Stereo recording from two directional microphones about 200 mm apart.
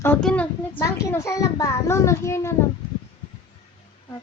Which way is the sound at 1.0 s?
15° left (ahead or behind).